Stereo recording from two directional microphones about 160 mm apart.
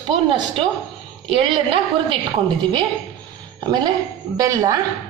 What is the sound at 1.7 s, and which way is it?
Speech, 35° right (ahead or behind).